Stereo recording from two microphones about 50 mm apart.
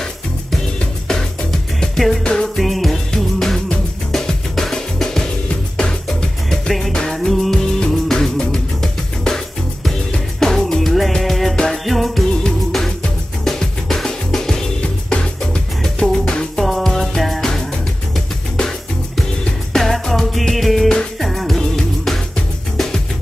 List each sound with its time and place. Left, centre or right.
1.8 s music: centre
2.6 s music: centre
6.9 s music: centre
7.5 s music of bollywood: centre
7.9 s music: centre
11.5 s music: centre
11.8 s music: centre
16.6 s music: centre
18.6 s music: centre
19.7 s music: centre